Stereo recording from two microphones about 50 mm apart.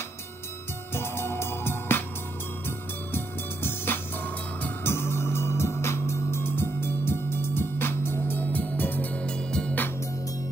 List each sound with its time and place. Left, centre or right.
0.9 s music: left
3.1 s music: left
9.1 s music: centre